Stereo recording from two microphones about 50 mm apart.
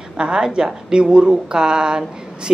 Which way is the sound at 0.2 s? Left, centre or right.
Centre.